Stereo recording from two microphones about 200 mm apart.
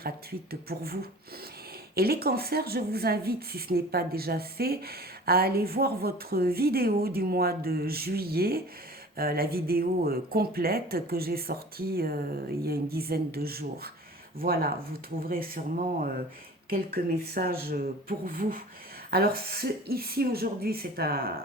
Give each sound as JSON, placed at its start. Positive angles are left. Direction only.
{"t": 0.0, "sound": "speech", "side_deg": -50}
{"t": 2.0, "sound": "speech", "side_deg": -50}
{"t": 16.6, "sound": "speech", "side_deg": -50}